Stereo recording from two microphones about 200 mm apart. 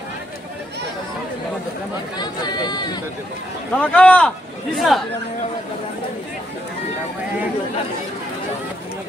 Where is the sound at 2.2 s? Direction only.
20° left (ahead or behind).